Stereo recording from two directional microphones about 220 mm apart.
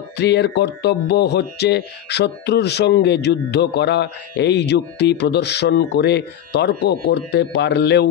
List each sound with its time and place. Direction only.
0.2 s speech: 50° left (ahead or behind)